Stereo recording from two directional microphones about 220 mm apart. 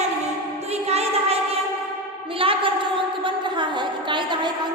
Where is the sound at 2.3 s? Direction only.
25° right (ahead or behind).